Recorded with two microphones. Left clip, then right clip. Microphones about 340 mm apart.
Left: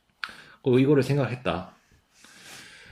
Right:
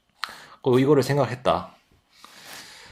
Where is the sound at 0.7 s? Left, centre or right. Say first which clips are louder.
Right 2 dB; centre.